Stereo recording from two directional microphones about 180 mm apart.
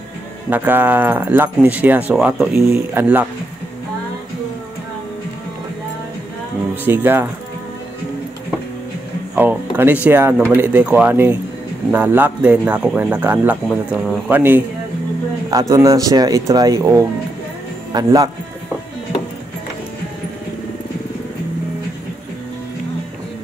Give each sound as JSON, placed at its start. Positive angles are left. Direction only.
{"t": 0.5, "sound": "speech", "side_deg": -10}
{"t": 6.7, "sound": "speech", "side_deg": -10}
{"t": 9.3, "sound": "speech", "side_deg": -10}
{"t": 15.7, "sound": "speech", "side_deg": -20}